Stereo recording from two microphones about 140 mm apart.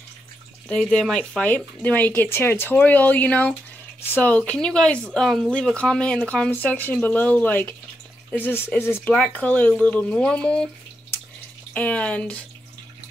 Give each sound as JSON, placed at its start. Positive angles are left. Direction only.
{"t": 0.7, "sound": "speech", "side_deg": 5}
{"t": 11.7, "sound": "speech", "side_deg": 10}